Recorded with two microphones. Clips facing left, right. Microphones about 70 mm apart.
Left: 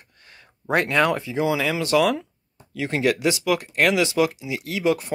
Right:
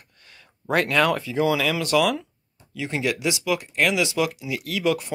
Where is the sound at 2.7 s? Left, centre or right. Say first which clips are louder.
Left 4 dB; left.